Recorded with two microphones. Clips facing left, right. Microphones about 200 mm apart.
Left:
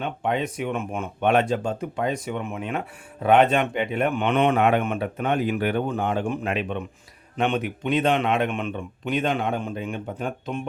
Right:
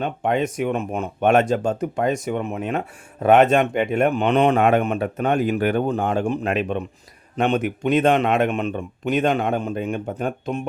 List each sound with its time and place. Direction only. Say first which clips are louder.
0.0 s a man's voice: right 4 dB; 45° right (ahead or behind)